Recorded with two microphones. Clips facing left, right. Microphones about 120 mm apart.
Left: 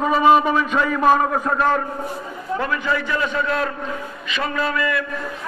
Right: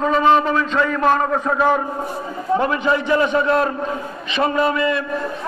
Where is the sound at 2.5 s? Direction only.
25° right (ahead or behind).